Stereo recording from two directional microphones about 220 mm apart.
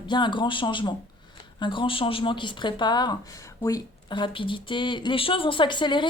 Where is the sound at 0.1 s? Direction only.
20° left (ahead or behind).